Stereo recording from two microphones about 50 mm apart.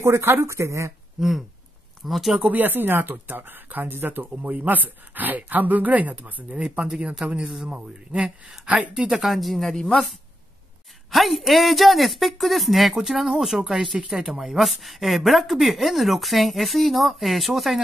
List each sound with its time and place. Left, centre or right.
0.0 s speech: right
2.0 s speech: centre
2.5 s speech: right
7.2 s speech: centre
8.6 s speech: right
8.9 s speech: centre
11.1 s speech: centre